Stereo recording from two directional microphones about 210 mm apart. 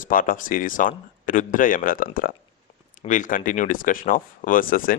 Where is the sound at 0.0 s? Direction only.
40° left (ahead or behind).